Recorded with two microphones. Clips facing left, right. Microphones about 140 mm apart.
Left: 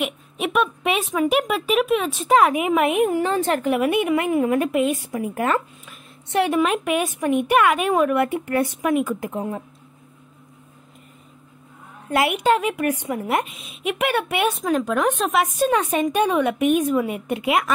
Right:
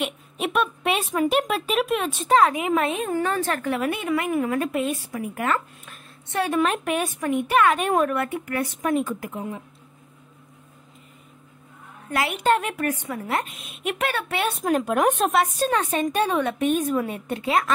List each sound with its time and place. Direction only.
0.0 s speech: centre (ahead or behind)
2.3 s a woman's voice: 15° left (ahead or behind)
8.8 s a woman's voice: 10° left (ahead or behind)
12.4 s a woman's voice: 5° left (ahead or behind)
14.6 s speech: 10° right (ahead or behind)
15.3 s a woman's voice: 10° left (ahead or behind)